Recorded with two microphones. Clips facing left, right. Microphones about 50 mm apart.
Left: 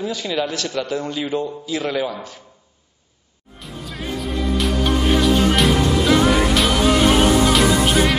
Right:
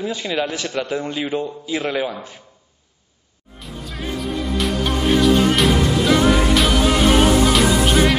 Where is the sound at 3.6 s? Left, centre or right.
Centre.